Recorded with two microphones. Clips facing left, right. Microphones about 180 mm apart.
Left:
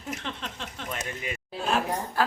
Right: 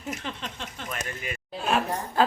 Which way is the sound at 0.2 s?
5° right (ahead or behind).